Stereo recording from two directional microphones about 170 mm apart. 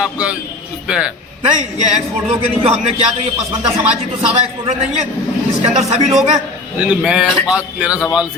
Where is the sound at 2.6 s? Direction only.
40° right (ahead or behind).